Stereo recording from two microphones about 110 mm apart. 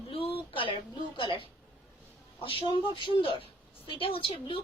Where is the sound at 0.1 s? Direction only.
55° left (ahead or behind).